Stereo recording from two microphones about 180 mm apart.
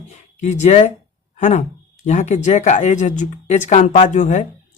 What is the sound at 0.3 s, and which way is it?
Speech, 40° left (ahead or behind).